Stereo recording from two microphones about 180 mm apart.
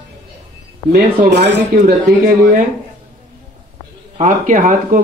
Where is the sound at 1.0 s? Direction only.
60° right (ahead or behind).